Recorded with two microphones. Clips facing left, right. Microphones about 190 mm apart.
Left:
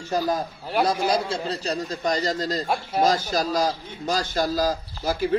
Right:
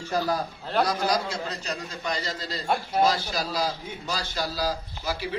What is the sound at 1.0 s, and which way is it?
A man's voice, 30° left (ahead or behind).